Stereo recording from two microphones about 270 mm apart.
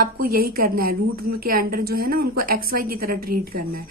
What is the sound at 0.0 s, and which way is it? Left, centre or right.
A woman's voice, right.